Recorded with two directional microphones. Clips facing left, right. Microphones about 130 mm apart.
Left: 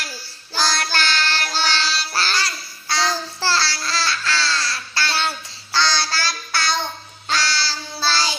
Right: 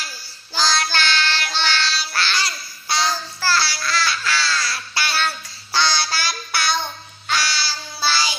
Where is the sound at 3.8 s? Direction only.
30° left (ahead or behind).